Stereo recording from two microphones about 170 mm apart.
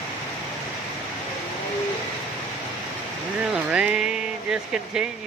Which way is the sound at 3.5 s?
5° right (ahead or behind).